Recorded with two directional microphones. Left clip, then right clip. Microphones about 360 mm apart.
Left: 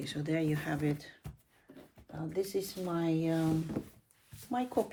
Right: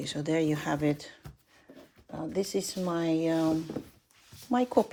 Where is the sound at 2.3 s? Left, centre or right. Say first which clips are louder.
Right 3 dB; right.